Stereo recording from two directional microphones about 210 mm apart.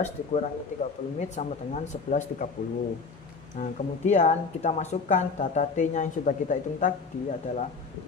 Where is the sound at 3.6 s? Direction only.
40° left (ahead or behind).